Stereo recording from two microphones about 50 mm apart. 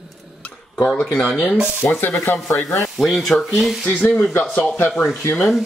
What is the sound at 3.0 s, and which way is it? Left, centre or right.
Speech, centre.